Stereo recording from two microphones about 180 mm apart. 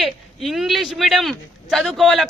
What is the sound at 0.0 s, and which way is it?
A man's voice, centre (ahead or behind).